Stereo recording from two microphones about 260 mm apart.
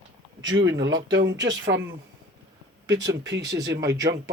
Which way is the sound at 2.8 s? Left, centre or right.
Centre.